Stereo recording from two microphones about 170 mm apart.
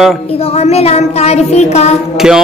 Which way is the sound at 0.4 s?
35° left (ahead or behind).